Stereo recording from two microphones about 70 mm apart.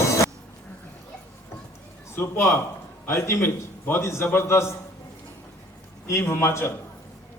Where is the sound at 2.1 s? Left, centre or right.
Left.